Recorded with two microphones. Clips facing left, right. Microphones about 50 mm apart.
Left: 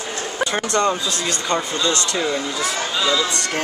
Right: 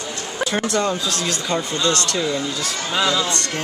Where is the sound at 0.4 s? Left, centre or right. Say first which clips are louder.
Left 1 dB; centre.